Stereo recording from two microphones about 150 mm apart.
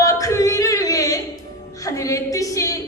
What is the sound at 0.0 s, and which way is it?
Singing, 20° left (ahead or behind).